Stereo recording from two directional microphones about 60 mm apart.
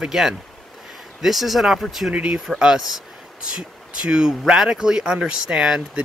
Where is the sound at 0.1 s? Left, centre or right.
Centre.